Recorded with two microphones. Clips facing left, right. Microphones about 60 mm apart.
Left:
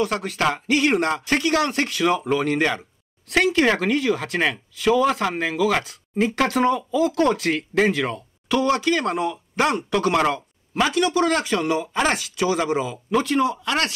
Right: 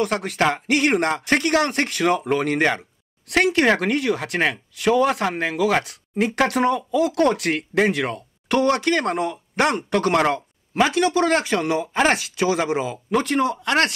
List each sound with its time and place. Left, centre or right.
0.0 s speech: right
0.4 s speech: right
0.7 s speech: right